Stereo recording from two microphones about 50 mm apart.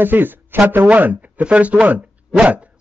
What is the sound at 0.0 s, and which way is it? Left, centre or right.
A man's voice, right.